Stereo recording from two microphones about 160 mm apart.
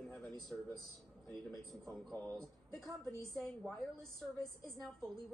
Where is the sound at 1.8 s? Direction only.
10° left (ahead or behind).